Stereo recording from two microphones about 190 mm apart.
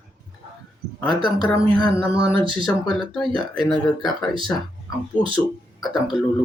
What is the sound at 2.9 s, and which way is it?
Speech, 5° left (ahead or behind).